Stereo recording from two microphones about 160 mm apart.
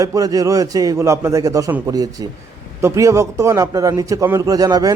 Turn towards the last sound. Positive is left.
turn(degrees=-25)  # may be behind; listen again after turning